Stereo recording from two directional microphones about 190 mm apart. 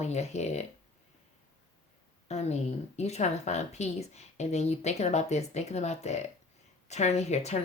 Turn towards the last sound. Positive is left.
turn(degrees=35)  # may be behind; listen again after turning